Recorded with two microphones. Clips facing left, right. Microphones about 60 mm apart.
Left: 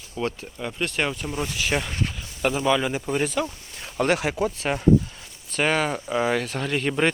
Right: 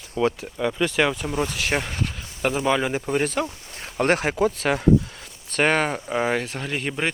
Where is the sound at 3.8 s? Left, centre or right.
Right.